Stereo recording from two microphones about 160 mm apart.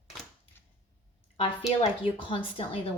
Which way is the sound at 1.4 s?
40° left (ahead or behind).